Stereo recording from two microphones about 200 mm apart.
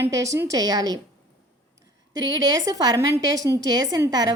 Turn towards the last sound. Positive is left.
turn(degrees=-20)  # may be behind; listen again after turning